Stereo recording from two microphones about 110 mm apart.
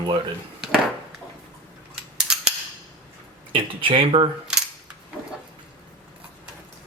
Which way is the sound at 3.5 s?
50° right (ahead or behind).